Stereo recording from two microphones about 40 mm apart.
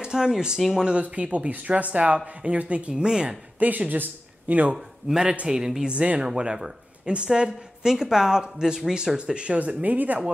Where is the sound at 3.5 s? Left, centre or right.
Right.